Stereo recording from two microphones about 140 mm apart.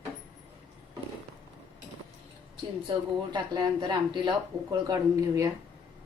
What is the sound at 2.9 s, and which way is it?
Speech, 30° right (ahead or behind).